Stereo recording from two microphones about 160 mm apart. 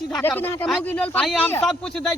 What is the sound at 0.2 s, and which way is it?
Speech, 15° left (ahead or behind).